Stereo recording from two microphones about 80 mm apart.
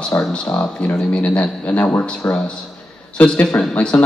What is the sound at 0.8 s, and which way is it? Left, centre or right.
Speech, centre.